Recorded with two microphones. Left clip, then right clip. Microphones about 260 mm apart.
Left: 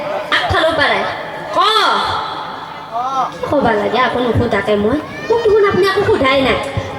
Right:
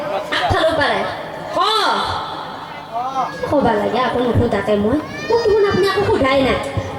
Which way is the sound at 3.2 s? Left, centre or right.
Centre.